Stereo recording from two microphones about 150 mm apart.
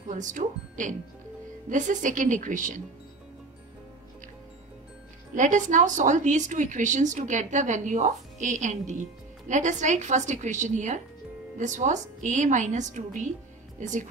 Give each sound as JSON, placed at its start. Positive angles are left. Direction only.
{"t": 0.1, "sound": "a woman's voice", "side_deg": -55}
{"t": 5.3, "sound": "a woman's voice", "side_deg": -55}